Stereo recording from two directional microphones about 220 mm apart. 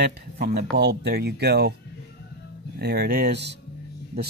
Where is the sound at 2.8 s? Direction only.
45° right (ahead or behind).